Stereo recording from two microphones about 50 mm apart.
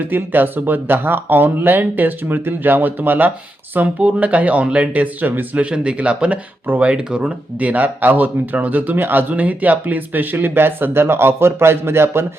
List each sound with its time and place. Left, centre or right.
0.0 s speech: right
5.7 s speech: right
7.6 s speech: right
10.3 s a man's voice: right